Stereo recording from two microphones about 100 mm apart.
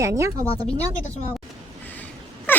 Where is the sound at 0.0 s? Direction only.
30° right (ahead or behind).